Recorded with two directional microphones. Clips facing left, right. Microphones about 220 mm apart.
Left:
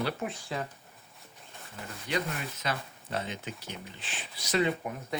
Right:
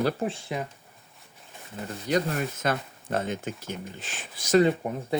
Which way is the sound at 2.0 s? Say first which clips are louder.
Right 7 dB; 40° right (ahead or behind).